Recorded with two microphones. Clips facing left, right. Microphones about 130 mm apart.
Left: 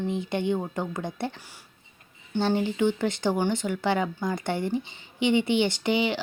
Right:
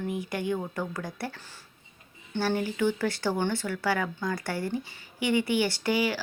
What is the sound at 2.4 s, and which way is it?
Speech, 20° left (ahead or behind).